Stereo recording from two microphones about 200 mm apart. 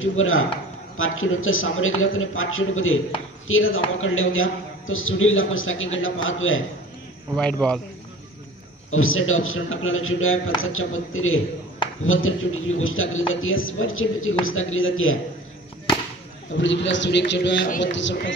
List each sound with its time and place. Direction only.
0.0 s a man's voice: 80° left
7.6 s a man's voice: 5° left (ahead or behind)
8.9 s a man's voice: 90° left
16.5 s a man's voice: 65° left (ahead or behind)